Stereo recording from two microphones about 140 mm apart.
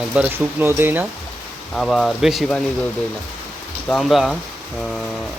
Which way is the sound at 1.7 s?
Centre (ahead or behind).